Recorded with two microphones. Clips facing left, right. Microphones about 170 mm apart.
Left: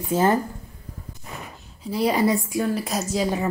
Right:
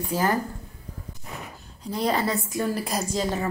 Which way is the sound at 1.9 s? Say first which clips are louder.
Left 4 dB; 10° left (ahead or behind).